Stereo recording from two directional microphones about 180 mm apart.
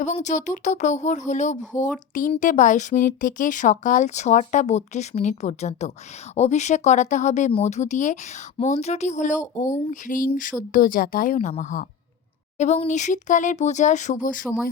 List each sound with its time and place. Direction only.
0.0 s speech: 40° left (ahead or behind)